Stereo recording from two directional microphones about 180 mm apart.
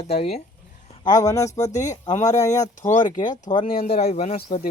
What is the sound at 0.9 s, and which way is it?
Speech, 20° left (ahead or behind).